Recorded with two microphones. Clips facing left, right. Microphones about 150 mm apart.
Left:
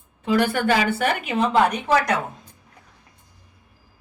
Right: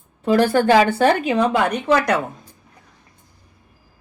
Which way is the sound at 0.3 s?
35° right (ahead or behind).